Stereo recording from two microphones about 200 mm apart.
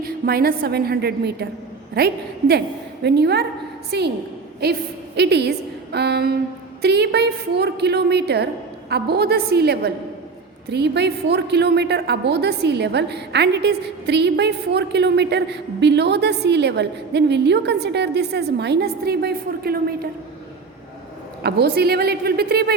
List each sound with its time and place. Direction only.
0.0 s a woman's voice: 50° right (ahead or behind)
21.4 s a woman's voice: 55° right (ahead or behind)